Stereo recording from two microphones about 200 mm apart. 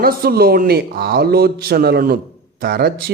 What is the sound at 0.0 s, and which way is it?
A man's voice, 50° right (ahead or behind).